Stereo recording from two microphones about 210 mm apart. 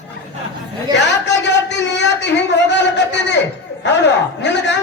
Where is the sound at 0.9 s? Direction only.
55° left (ahead or behind).